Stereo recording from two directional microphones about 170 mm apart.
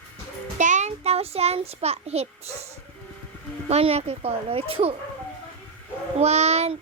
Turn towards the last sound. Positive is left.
turn(degrees=-40)  # may be behind; listen again after turning